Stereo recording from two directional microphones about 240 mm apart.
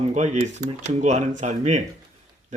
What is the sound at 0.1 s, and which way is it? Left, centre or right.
Speech, right.